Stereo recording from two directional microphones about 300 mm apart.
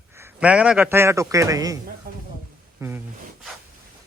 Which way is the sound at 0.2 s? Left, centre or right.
Centre.